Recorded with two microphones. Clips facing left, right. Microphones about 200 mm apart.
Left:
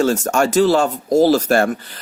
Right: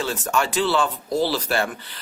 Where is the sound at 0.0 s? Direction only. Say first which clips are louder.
Left 8 dB; 45° left (ahead or behind).